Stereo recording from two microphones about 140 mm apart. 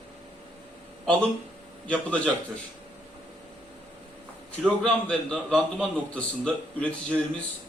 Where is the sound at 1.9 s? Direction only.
10° left (ahead or behind).